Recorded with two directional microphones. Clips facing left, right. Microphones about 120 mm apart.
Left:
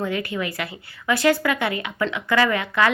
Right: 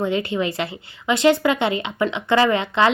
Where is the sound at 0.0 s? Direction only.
25° right (ahead or behind).